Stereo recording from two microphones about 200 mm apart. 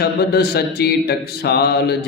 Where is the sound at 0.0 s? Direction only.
50° left (ahead or behind).